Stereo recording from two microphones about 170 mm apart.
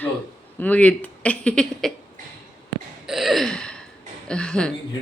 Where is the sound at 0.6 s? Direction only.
10° left (ahead or behind).